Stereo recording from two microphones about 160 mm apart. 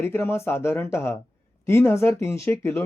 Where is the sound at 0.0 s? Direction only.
15° left (ahead or behind).